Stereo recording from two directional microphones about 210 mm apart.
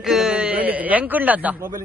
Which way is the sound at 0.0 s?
Centre (ahead or behind).